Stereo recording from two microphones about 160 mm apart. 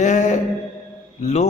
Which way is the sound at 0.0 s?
45° left (ahead or behind).